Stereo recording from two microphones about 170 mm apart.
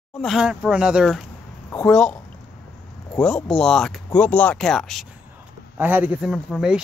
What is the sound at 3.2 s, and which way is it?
Speech, 5° left (ahead or behind).